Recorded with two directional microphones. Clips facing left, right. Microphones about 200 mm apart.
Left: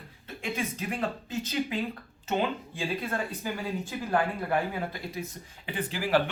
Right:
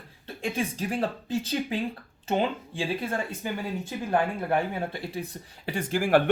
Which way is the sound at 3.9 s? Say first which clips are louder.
Right 2 dB; 25° right (ahead or behind).